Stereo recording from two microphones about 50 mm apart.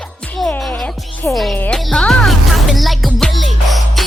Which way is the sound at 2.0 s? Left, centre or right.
Centre.